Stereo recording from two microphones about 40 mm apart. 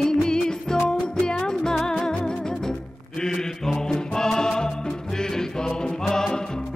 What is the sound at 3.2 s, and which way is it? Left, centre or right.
Music, centre.